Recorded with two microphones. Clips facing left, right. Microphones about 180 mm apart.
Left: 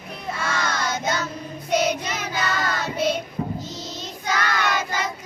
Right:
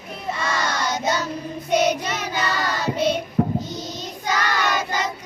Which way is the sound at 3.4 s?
65° right (ahead or behind).